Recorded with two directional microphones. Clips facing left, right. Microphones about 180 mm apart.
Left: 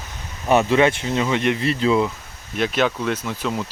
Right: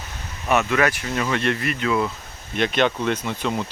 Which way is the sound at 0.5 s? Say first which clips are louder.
Left 4 dB; 30° left (ahead or behind).